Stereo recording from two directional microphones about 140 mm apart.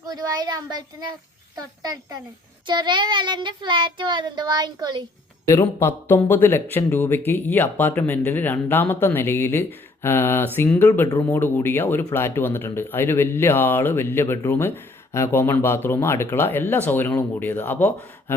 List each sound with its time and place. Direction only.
0.0 s speech: 30° right (ahead or behind)
2.6 s child singing: 30° right (ahead or behind)
5.5 s speech: 15° left (ahead or behind)